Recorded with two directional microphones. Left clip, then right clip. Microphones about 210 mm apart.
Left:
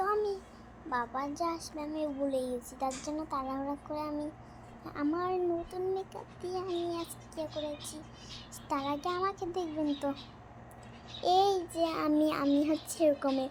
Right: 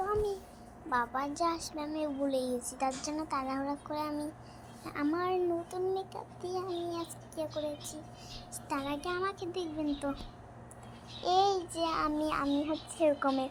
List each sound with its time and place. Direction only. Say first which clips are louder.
0.0 s a sound: left 1 dB; 5° left (ahead or behind)
0.9 s a child's voice: right 2 dB; centre (ahead or behind)
8.7 s a child's voice: left 2 dB; 5° left (ahead or behind)
11.2 s a child's voice: left 1 dB; 15° left (ahead or behind)